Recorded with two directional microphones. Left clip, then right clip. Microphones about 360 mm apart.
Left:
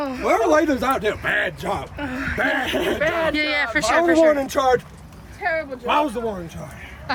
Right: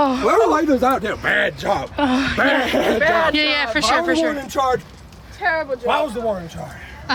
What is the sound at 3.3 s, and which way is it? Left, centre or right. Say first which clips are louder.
Speech: right 3 dB; centre.